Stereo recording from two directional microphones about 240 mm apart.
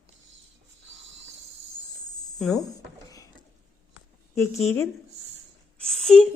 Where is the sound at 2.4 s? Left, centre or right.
Centre.